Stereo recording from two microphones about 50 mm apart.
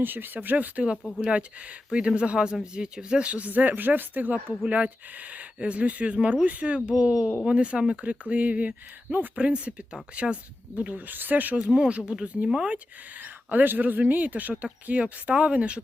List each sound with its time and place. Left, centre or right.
0.0 s speech: right
10.9 s speech: right
11.6 s speech: centre
13.1 s speech: right